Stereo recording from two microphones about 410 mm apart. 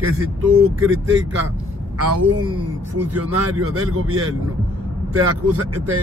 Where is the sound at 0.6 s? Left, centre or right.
Right.